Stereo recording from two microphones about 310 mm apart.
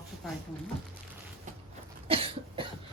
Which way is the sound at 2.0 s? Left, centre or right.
Centre.